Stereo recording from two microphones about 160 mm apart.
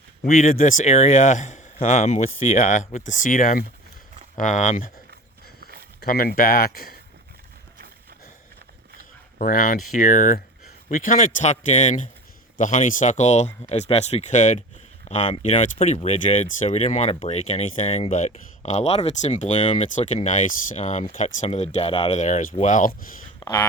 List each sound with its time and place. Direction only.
0.3 s speech: 55° left (ahead or behind)
6.0 s speech: 70° left (ahead or behind)
9.4 s speech: 55° left (ahead or behind); by 22.2 s 35° left (ahead or behind)
22.2 s speech: 50° left (ahead or behind)